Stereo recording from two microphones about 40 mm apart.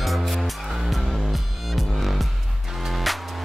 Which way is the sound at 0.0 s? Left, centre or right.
Centre.